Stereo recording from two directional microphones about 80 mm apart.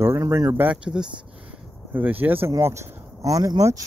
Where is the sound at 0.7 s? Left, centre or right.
Centre.